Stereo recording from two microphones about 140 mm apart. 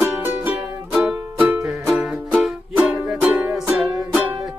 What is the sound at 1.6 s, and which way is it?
Music, 5° right (ahead or behind).